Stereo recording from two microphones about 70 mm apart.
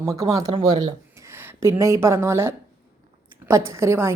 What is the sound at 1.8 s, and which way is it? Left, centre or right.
A woman's voice, right.